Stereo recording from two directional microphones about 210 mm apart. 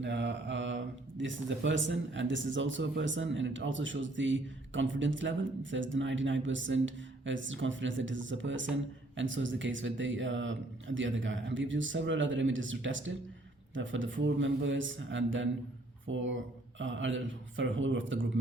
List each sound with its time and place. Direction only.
0.0 s speech: 60° right (ahead or behind)